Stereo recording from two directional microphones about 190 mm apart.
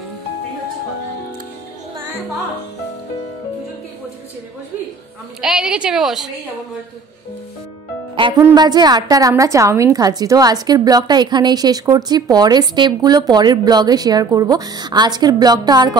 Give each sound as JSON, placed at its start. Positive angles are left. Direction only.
{"t": 5.4, "sound": "a woman's voice", "side_deg": -5}
{"t": 8.4, "sound": "a woman's voice", "side_deg": -20}